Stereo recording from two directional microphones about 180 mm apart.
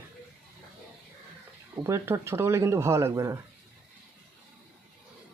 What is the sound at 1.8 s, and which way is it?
Speech, 15° right (ahead or behind).